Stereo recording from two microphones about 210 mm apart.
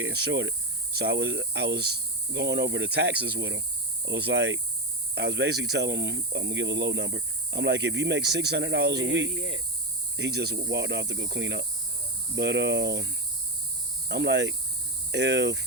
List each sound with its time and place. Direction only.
0.0 s speech: 60° right (ahead or behind)
9.3 s cricket: 35° left (ahead or behind)
10.2 s speech: 55° right (ahead or behind)